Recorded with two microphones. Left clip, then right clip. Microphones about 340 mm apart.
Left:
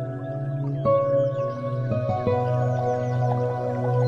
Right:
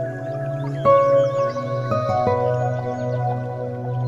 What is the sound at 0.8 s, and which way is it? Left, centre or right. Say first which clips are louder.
Music: right 6 dB; right.